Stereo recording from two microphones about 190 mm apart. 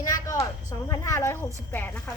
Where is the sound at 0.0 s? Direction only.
15° left (ahead or behind).